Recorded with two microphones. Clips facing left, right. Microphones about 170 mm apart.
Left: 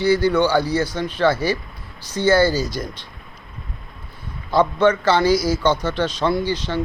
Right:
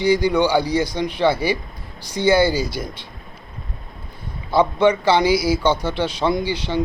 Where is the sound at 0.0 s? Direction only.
15° right (ahead or behind).